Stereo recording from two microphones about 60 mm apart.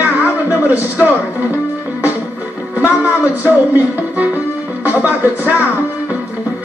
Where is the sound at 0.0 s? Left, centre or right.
Right.